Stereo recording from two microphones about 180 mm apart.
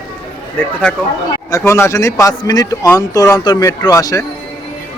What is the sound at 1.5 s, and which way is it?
A man's voice, 15° left (ahead or behind).